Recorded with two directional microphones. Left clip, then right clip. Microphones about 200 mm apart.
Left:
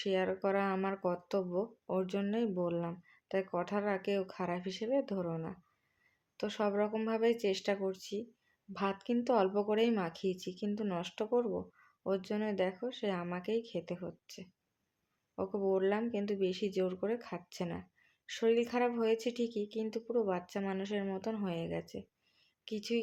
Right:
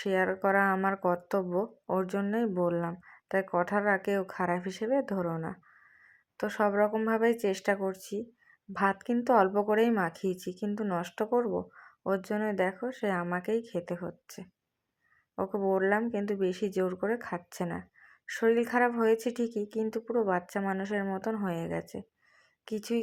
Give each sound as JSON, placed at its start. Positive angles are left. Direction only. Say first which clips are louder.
{"t": 0.0, "sound": "a woman's voice", "louder": "right 5 dB", "side_deg": -15}
{"t": 21.7, "sound": "speech", "louder": "right 5 dB", "side_deg": 0}
{"t": 22.7, "sound": "speech", "louder": "right 4 dB", "side_deg": -15}